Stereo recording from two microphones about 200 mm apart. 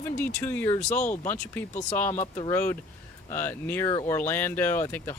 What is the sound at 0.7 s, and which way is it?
Speech, 35° left (ahead or behind).